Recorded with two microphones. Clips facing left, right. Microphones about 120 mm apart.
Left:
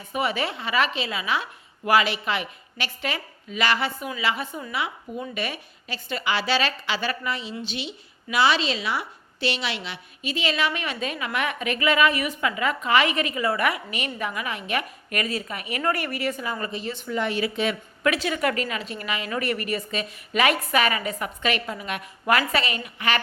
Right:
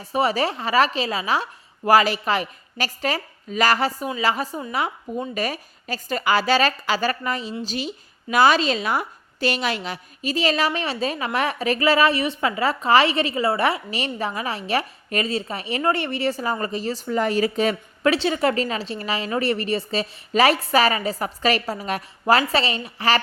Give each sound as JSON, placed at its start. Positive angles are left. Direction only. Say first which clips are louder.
{"t": 0.0, "sound": "a woman's voice", "louder": "right 5 dB", "side_deg": -35}